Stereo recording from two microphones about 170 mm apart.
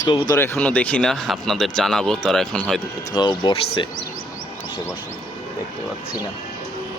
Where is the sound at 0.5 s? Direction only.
10° left (ahead or behind).